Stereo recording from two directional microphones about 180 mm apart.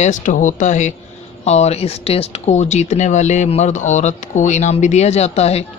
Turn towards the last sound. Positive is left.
turn(degrees=35)  # may be behind; listen again after turning